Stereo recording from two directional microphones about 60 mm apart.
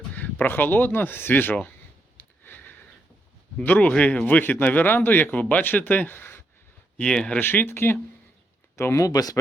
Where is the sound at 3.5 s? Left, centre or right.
Left.